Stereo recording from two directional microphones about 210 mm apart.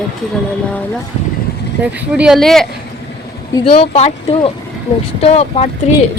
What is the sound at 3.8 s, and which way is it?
Speech, 30° left (ahead or behind).